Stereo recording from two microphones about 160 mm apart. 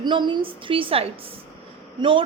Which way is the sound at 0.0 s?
30° right (ahead or behind).